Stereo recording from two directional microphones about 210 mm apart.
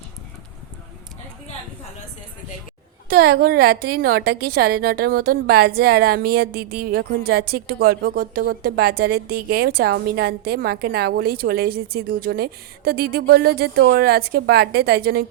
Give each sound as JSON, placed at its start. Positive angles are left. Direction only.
{"t": 3.1, "sound": "a woman's voice", "side_deg": -45}